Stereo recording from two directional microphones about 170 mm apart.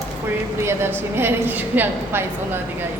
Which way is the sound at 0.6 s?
15° right (ahead or behind).